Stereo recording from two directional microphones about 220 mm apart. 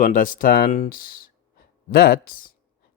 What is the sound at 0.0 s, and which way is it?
Speech, 35° left (ahead or behind).